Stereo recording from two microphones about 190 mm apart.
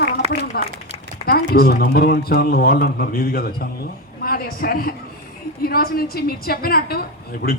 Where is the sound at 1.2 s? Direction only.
55° left (ahead or behind).